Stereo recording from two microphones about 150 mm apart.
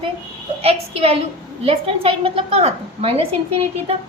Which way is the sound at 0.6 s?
40° right (ahead or behind).